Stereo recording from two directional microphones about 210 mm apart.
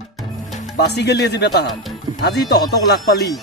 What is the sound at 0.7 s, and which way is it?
Speech, 55° left (ahead or behind).